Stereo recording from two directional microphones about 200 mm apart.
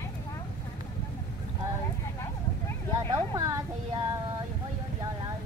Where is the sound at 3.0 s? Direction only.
15° right (ahead or behind).